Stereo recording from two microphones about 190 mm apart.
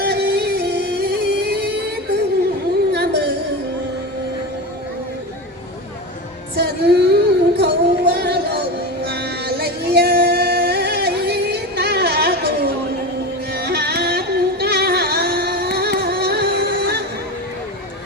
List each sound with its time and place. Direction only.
0.0 s music: 60° right (ahead or behind)
2.9 s a sound: 60° right (ahead or behind)
6.6 s music: 60° right (ahead or behind)